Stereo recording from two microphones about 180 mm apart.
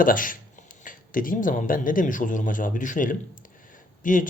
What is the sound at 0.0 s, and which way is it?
Speech, 50° left (ahead or behind).